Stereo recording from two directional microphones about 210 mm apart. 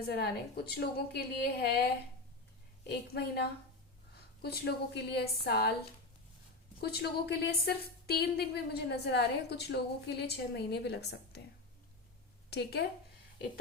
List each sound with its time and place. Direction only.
0.1 s a woman's voice: 50° left (ahead or behind)
3.1 s a woman's voice: 50° left (ahead or behind)
6.7 s a woman's voice: 50° left (ahead or behind)
12.5 s speech: 50° left (ahead or behind)